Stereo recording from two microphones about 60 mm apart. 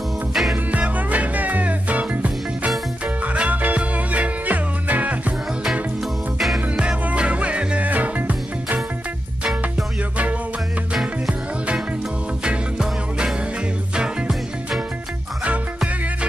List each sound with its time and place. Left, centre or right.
0.3 s music: centre
0.7 s music: right
6.8 s music: centre
12.4 s music: centre